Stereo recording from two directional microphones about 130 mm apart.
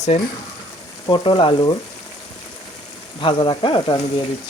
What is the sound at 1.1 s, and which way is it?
Speech, 35° left (ahead or behind).